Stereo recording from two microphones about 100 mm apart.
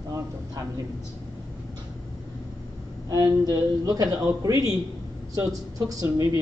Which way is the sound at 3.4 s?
40° right (ahead or behind).